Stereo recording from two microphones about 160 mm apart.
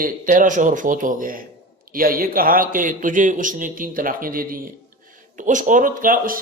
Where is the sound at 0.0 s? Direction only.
55° right (ahead or behind).